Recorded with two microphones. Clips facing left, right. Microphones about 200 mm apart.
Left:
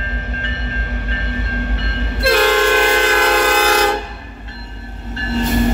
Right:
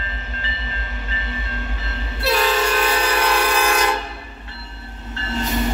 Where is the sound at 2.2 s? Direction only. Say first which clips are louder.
Left 6 dB; 90° left.